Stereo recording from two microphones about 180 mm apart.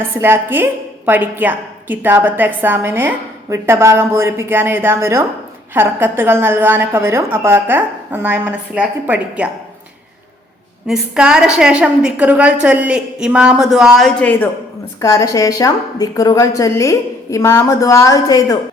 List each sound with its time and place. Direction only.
0.0 s a woman's voice: 10° right (ahead or behind)
10.8 s a woman's voice: centre (ahead or behind); by 18.5 s 20° left (ahead or behind)